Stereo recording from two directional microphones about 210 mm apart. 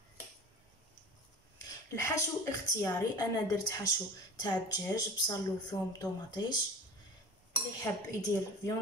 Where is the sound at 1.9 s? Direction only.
15° left (ahead or behind).